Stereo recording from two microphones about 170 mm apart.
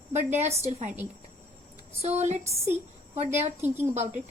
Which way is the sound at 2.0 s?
40° right (ahead or behind).